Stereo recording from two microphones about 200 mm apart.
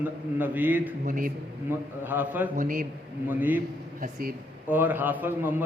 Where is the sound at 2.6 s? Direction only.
45° right (ahead or behind).